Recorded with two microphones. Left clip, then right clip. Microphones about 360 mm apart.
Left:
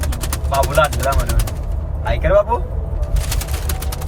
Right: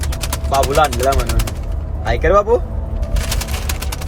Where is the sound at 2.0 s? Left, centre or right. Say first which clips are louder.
Right 1 dB; centre.